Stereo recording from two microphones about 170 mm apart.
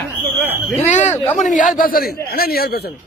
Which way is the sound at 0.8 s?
45° left (ahead or behind).